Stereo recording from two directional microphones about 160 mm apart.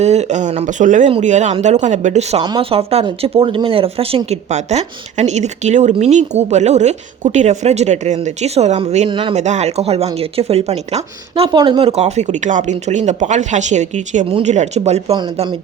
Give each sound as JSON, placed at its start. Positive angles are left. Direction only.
{"t": 0.0, "sound": "speech", "side_deg": -45}
{"t": 2.4, "sound": "speech", "side_deg": -30}
{"t": 9.0, "sound": "speech", "side_deg": -30}
{"t": 9.3, "sound": "speech", "side_deg": -45}